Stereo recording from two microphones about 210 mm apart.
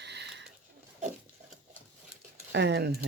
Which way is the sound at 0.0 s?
55° right (ahead or behind).